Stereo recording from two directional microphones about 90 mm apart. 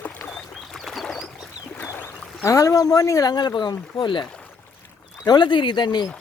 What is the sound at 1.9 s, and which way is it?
Speech, 30° left (ahead or behind).